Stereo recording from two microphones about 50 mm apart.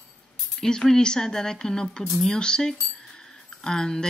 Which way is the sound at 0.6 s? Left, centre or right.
Centre.